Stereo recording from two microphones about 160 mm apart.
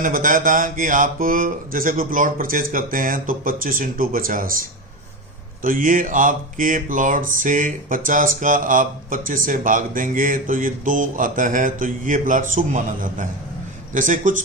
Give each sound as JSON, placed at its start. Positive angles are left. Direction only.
{"t": 0.0, "sound": "speech", "side_deg": -55}
{"t": 5.6, "sound": "speech", "side_deg": -60}